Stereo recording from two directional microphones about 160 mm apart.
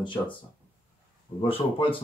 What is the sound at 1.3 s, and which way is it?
Speech, 35° left (ahead or behind).